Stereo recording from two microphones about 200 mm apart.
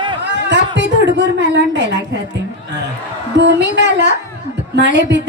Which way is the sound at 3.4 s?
60° right (ahead or behind).